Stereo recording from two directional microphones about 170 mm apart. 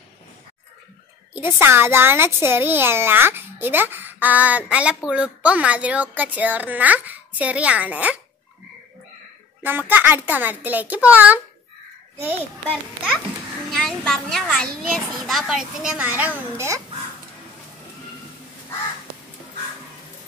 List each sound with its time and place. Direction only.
1.3 s a child's voice: 10° right (ahead or behind)
9.6 s a child's voice: 10° right (ahead or behind)
13.7 s a child's voice: centre (ahead or behind); by 16.8 s 15° right (ahead or behind)